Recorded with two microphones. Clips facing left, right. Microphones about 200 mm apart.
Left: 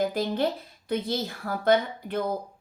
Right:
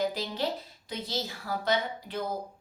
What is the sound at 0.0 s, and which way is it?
A woman's voice, 55° left (ahead or behind).